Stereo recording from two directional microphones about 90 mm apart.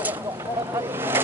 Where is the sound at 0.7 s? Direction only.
30° right (ahead or behind).